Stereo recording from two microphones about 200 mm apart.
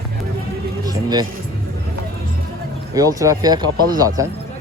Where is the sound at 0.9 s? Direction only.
20° right (ahead or behind).